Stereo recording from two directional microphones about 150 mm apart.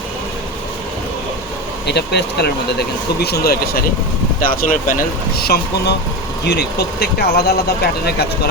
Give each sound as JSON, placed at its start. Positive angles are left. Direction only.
{"t": 2.0, "sound": "speech", "side_deg": 90}
{"t": 4.4, "sound": "speech", "side_deg": 65}
{"t": 5.4, "sound": "speech", "side_deg": 90}